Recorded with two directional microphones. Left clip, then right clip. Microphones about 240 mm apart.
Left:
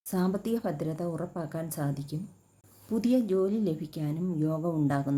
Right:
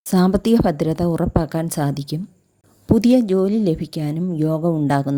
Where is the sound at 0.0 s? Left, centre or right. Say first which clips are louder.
Right 13 dB; right.